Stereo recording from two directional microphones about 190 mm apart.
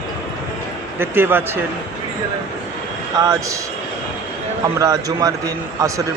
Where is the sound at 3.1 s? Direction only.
15° right (ahead or behind).